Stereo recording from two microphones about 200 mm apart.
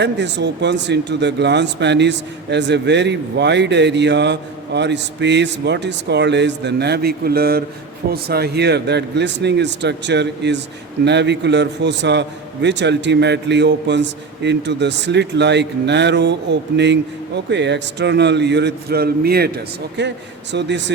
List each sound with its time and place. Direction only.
0.0 s speech: 60° right (ahead or behind)